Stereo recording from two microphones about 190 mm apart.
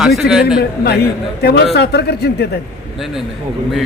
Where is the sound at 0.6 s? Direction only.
55° left (ahead or behind).